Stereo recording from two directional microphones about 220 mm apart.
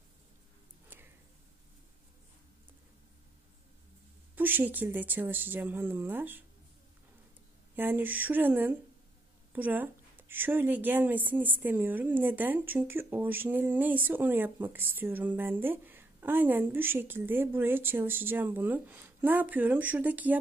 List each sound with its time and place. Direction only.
4.4 s a woman's voice: 10° right (ahead or behind)
7.7 s a woman's voice: 10° right (ahead or behind)